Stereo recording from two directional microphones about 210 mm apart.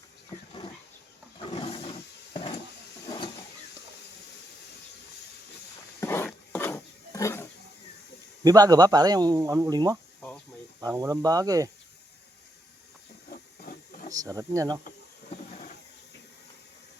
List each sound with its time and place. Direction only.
1.5 s a sound: 25° left (ahead or behind)
6.0 s roaring cats: 10° left (ahead or behind)
8.4 s speech: 15° right (ahead or behind)
10.2 s insect: 5° left (ahead or behind)
10.8 s speech: 15° right (ahead or behind)
14.1 s speech: 15° right (ahead or behind)